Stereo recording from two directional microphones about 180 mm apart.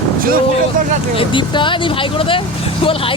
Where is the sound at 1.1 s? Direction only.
30° left (ahead or behind).